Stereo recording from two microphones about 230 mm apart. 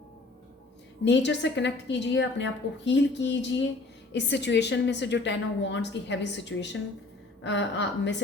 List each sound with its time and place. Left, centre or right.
1.0 s a woman's voice: left